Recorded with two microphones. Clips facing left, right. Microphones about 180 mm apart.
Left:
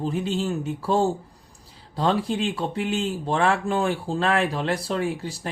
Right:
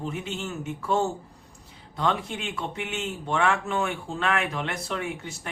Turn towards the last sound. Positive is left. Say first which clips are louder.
# left 6 dB
turn(degrees=35)  # may be behind; listen again after turning